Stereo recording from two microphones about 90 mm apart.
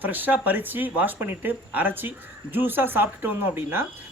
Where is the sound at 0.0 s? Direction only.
20° right (ahead or behind).